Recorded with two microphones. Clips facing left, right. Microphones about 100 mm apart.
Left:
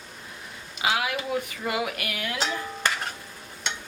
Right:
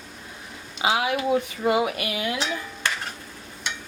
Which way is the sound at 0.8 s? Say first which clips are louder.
Right 4 dB; 25° right (ahead or behind).